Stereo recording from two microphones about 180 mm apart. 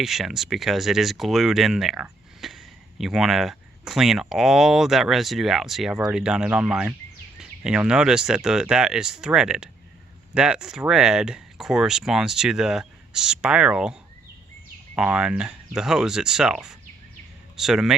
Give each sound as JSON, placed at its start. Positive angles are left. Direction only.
{"t": 0.0, "sound": "speech", "side_deg": 0}
{"t": 14.9, "sound": "speech", "side_deg": -5}